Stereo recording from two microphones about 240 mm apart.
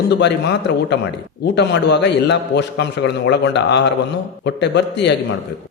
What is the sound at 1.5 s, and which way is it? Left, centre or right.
A man's voice, left.